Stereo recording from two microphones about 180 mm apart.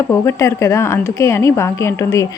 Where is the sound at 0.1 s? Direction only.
15° left (ahead or behind).